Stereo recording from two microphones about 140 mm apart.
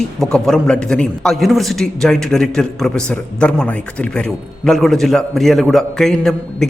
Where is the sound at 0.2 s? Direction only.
5° left (ahead or behind).